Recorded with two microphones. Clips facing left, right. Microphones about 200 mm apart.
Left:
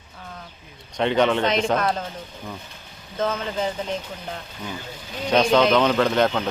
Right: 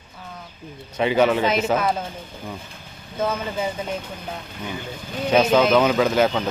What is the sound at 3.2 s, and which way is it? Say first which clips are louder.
Speech: even; 10° right (ahead or behind).